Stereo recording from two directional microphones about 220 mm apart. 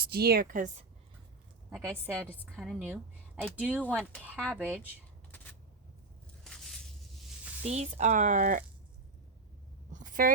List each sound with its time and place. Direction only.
0.1 s speech: 45° right (ahead or behind)
1.8 s a woman's voice: 10° right (ahead or behind)
5.3 s a sound: 10° left (ahead or behind)
6.4 s squish: centre (ahead or behind)
7.6 s speech: 30° right (ahead or behind)
9.9 s a sound: 35° right (ahead or behind)